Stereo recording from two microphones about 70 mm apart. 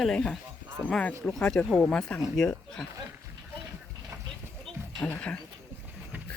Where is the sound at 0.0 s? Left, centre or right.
Centre.